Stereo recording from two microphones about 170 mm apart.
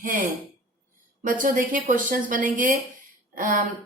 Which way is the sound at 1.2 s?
50° right (ahead or behind).